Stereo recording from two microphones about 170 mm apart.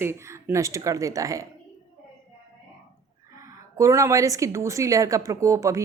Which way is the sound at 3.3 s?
20° right (ahead or behind).